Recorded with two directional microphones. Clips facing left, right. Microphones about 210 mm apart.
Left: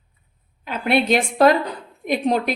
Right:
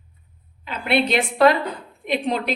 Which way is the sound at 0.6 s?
45° left (ahead or behind).